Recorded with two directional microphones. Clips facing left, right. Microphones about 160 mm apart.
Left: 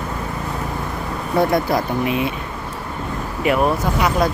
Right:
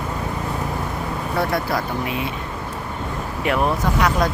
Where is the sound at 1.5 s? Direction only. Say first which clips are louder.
Left 4 dB; 20° left (ahead or behind).